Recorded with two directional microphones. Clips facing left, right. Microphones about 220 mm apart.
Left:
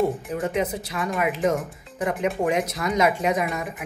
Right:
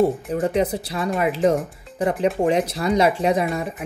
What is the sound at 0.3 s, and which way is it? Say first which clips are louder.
Speech: right 4 dB; 35° right (ahead or behind).